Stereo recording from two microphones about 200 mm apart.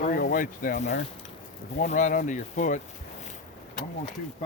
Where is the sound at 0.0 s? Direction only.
45° left (ahead or behind).